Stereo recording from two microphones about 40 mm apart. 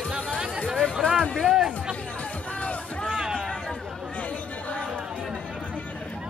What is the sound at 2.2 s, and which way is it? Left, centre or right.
Music, left.